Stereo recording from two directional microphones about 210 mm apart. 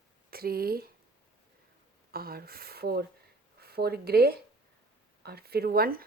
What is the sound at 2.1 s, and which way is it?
Speech, 45° right (ahead or behind).